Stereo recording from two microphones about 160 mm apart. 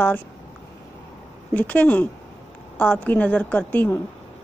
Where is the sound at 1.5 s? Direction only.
10° left (ahead or behind).